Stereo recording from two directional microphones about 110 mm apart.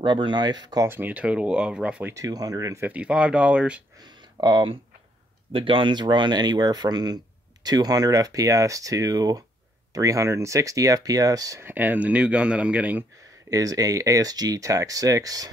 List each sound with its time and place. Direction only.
0.0 s speech: 45° right (ahead or behind)
0.8 s speech: 20° right (ahead or behind)
2.1 s speech: 35° right (ahead or behind)
2.9 s speech: 10° right (ahead or behind)
4.0 s speech: 40° right (ahead or behind)
11.6 s speech: 15° right (ahead or behind)
13.5 s speech: 30° right (ahead or behind)